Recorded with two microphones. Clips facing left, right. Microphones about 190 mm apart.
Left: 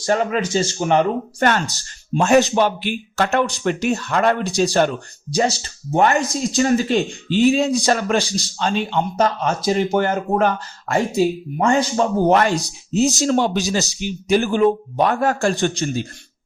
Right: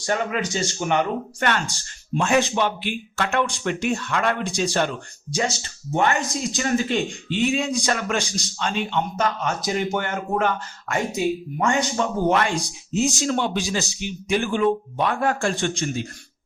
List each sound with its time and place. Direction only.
0.0 s speech: 35° left (ahead or behind)